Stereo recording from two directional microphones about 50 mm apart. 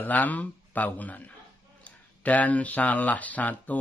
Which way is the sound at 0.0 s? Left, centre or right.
Left.